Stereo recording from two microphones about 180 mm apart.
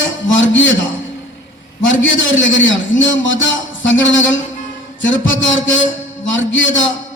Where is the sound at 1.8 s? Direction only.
90° left.